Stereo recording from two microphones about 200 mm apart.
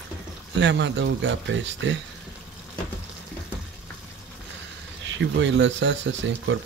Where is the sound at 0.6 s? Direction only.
60° right (ahead or behind).